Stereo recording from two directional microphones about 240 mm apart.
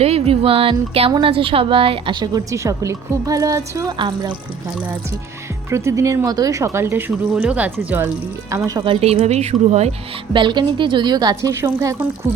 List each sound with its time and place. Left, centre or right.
0.0 s speech: right
5.7 s speech: centre